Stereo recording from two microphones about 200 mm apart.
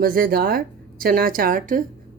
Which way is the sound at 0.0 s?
45° right (ahead or behind).